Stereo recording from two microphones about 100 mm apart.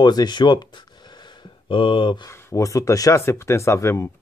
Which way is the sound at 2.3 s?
30° left (ahead or behind).